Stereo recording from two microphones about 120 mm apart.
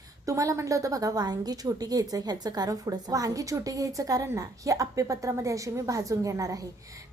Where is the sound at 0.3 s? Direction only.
25° right (ahead or behind).